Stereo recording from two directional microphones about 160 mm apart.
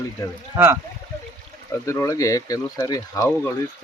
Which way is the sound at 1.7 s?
20° left (ahead or behind).